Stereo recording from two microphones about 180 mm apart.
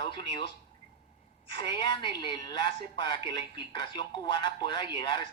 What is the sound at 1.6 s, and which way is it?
A woman's voice, 25° left (ahead or behind).